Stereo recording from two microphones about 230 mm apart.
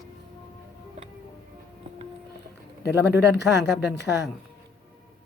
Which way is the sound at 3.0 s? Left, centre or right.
Left.